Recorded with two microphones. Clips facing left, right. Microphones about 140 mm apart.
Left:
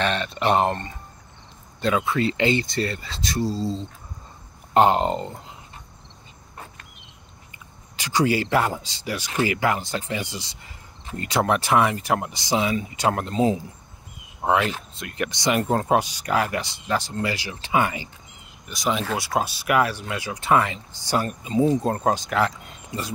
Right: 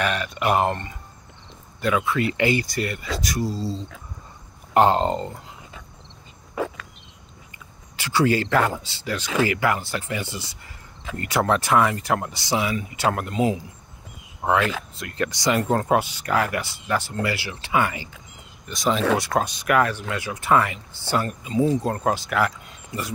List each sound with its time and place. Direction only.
0.0 s speech: 30° left (ahead or behind)
3.5 s speech: 5° right (ahead or behind)
4.7 s speech: 20° left (ahead or behind)
6.5 s a sound: 90° right
8.0 s speech: 15° left (ahead or behind)
14.4 s speech: 20° left (ahead or behind)
18.7 s speech: centre (ahead or behind)
21.5 s speech: 25° left (ahead or behind)